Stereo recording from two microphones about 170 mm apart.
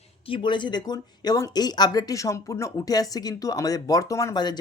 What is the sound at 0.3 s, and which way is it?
Speech, 30° left (ahead or behind).